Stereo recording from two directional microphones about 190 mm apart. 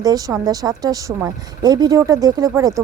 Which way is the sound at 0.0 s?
20° right (ahead or behind).